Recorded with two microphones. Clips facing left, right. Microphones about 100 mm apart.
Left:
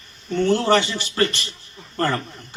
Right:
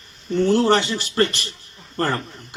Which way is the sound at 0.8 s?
Centre (ahead or behind).